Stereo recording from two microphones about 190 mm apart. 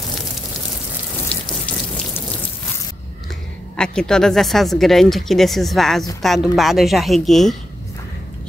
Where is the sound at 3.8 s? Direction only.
5° left (ahead or behind).